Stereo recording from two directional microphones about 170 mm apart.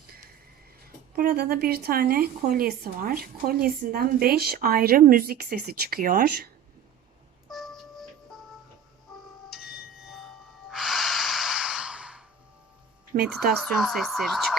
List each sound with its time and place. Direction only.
1.1 s speech: 55° right (ahead or behind)
7.5 s music: centre (ahead or behind)
9.5 s ding: centre (ahead or behind)
13.1 s a woman's voice: 55° right (ahead or behind)
13.6 s speech: centre (ahead or behind)